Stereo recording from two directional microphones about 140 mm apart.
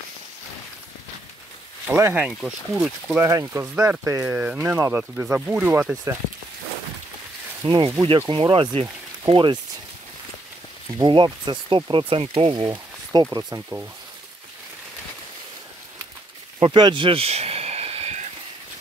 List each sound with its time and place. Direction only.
1.9 s speech: 15° right (ahead or behind)
2.2 s speech: 5° right (ahead or behind)
3.2 s speech: 20° right (ahead or behind)
7.8 s speech: 20° right (ahead or behind)
8.3 s speech: 35° right (ahead or behind)
11.0 s speech: 30° right (ahead or behind)
12.6 s speech: 30° right (ahead or behind)
16.5 s a sound: 30° right (ahead or behind); by 18.2 s 50° right (ahead or behind)